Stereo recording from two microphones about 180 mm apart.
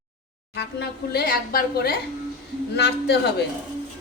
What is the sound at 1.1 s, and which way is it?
Speech, 55° left (ahead or behind).